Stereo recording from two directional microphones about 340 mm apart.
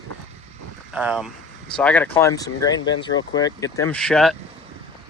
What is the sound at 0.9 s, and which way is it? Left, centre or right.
Speech, centre.